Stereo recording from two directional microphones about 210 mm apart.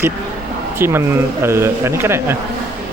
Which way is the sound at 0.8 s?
10° right (ahead or behind).